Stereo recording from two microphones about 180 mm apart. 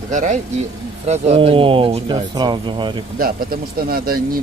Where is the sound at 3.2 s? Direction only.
55° right (ahead or behind).